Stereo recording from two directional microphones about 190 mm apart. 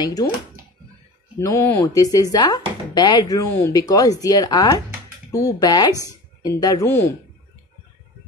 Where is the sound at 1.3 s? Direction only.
15° left (ahead or behind).